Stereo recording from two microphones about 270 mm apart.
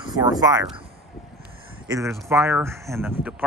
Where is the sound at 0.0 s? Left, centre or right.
Centre.